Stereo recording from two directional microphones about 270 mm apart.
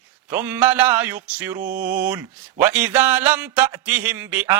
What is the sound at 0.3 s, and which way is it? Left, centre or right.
A man's voice, centre.